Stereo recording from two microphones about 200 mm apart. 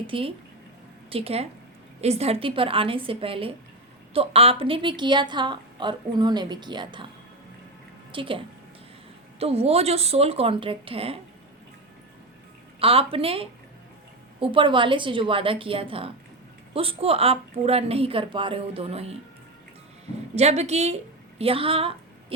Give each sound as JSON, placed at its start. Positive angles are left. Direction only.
{"t": 0.1, "sound": "a woman's voice", "side_deg": -25}
{"t": 8.1, "sound": "a woman's voice", "side_deg": -25}
{"t": 9.4, "sound": "a woman's voice", "side_deg": -30}
{"t": 12.8, "sound": "a woman's voice", "side_deg": -30}
{"t": 20.3, "sound": "a woman's voice", "side_deg": -35}